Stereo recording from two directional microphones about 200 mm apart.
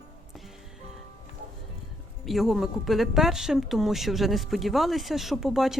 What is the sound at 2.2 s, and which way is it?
Speech, centre (ahead or behind).